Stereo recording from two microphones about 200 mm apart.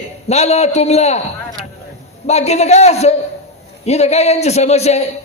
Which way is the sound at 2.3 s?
35° left (ahead or behind).